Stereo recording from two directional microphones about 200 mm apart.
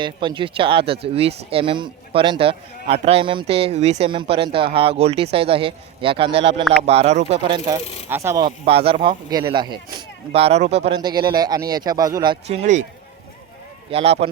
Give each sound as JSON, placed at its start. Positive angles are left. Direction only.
{"t": 0.0, "sound": "speech", "side_deg": -25}
{"t": 8.1, "sound": "speech", "side_deg": -15}
{"t": 8.4, "sound": "speech", "side_deg": -30}
{"t": 10.9, "sound": "speech", "side_deg": -20}
{"t": 13.9, "sound": "speech", "side_deg": -30}